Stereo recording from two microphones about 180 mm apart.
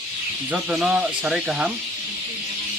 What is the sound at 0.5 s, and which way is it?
Speech, 5° right (ahead or behind).